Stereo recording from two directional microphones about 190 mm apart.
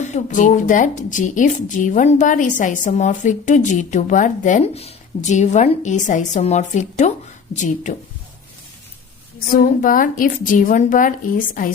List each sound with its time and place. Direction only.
0.0 s speech: 40° left (ahead or behind)
9.5 s a woman's voice: 50° left (ahead or behind)